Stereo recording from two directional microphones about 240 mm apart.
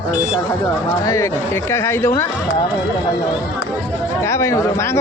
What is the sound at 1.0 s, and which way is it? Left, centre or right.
Speech, centre.